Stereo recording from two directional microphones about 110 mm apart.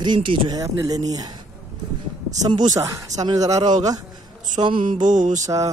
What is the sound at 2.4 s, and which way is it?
Speech, 40° right (ahead or behind).